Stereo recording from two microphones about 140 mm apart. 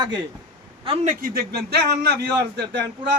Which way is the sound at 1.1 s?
90° right.